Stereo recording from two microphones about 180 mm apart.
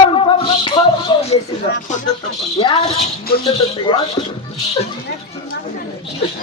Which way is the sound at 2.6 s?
25° left (ahead or behind).